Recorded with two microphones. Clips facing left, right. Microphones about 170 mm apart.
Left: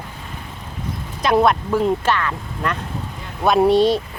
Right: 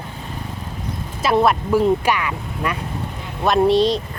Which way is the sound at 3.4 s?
Centre (ahead or behind).